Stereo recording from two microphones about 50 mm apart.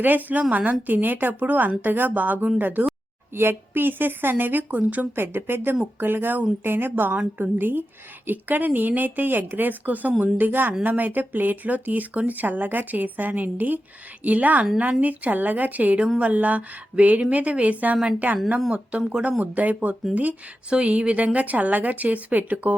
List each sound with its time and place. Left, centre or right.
0.0 s speech: right
5.1 s speech: right
18.7 s speech: right